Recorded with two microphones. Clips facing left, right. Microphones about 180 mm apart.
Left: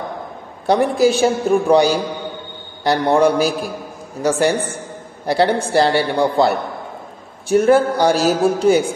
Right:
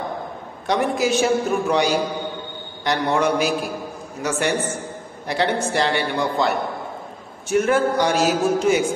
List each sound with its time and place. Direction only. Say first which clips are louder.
0.7 s a man's voice: left 6 dB; 35° left (ahead or behind)